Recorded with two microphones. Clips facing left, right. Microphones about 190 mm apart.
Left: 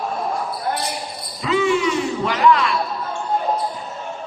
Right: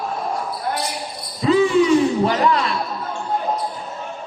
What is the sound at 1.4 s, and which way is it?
Basketball bounce, 35° right (ahead or behind).